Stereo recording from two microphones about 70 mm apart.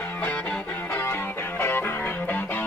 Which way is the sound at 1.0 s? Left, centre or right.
Left.